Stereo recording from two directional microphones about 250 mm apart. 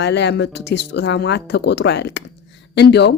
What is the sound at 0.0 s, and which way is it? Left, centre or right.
A woman's voice, left.